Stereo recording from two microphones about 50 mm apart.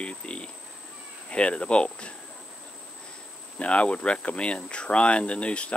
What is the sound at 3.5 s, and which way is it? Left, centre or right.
Speech, left.